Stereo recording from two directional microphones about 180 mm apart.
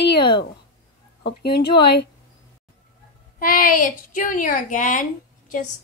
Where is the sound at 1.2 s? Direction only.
65° left (ahead or behind).